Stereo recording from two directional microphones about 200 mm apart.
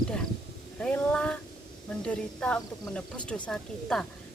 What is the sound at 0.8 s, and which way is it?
A woman's voice, 5° left (ahead or behind).